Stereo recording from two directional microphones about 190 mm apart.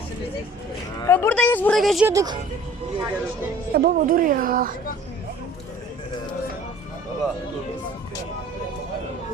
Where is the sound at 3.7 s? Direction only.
50° right (ahead or behind).